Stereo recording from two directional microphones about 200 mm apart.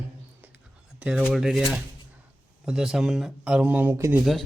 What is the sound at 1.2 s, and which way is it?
Speech, centre (ahead or behind).